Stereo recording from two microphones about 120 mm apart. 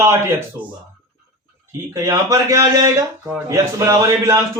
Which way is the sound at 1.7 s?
30° right (ahead or behind).